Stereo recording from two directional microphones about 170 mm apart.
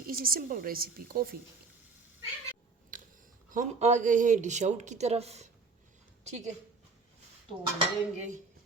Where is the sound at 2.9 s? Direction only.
50° right (ahead or behind).